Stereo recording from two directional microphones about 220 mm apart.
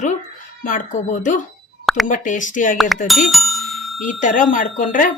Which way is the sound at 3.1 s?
Centre (ahead or behind).